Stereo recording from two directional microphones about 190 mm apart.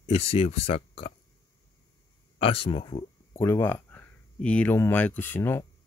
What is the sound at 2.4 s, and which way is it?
Speech, 30° left (ahead or behind).